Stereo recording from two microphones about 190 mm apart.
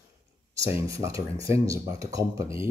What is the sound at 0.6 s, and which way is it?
Speech, 15° right (ahead or behind).